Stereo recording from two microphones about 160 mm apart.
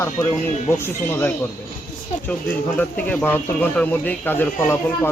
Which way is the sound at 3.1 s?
10° left (ahead or behind).